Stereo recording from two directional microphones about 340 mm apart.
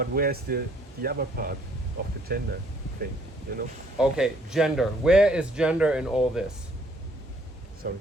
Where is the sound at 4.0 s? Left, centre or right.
Centre.